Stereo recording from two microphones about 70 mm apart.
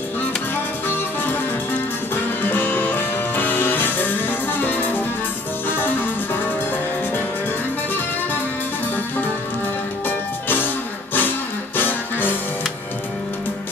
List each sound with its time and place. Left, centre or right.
0.8 s music: left
10.0 s music: left